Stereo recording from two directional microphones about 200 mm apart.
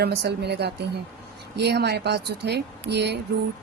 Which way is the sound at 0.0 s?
55° right (ahead or behind).